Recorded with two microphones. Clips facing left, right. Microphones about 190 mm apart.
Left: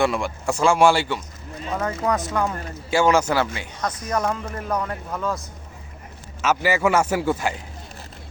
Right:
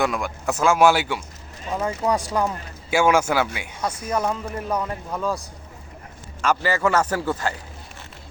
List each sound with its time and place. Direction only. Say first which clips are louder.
0.0 s speech: left 2 dB; centre (ahead or behind)
6.4 s a man's voice: left 1 dB; 10° left (ahead or behind)